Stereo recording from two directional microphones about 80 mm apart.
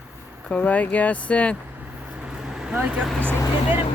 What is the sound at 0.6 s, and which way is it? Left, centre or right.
Speech, centre.